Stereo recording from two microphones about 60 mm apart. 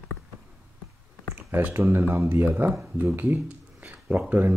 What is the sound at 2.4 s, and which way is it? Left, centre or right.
Speech, right.